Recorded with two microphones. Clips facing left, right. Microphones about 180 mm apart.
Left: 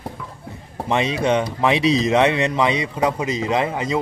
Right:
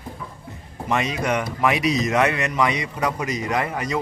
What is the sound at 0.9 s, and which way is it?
Speech, 30° left (ahead or behind).